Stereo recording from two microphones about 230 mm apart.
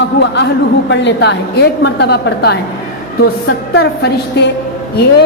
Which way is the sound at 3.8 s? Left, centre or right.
Left.